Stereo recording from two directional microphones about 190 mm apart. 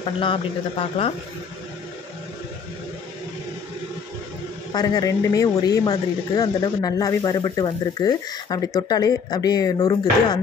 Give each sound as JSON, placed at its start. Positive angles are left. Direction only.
{"t": 0.0, "sound": "speech", "side_deg": 25}
{"t": 4.7, "sound": "speech", "side_deg": 20}